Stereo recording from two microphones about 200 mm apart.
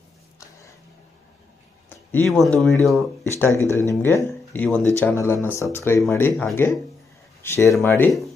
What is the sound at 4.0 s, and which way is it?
Speech, 10° left (ahead or behind).